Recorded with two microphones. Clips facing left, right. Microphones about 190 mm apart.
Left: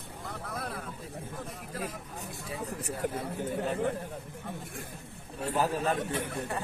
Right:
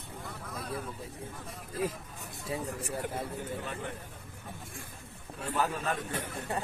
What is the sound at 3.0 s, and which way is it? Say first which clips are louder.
Speech: left 8 dB; 45° left (ahead or behind).